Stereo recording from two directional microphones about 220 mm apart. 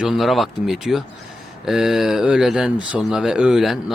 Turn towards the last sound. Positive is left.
turn(degrees=0)  # may be behind; listen again after turning